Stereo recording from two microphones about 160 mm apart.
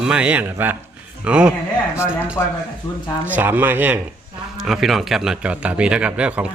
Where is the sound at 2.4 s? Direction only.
15° left (ahead or behind).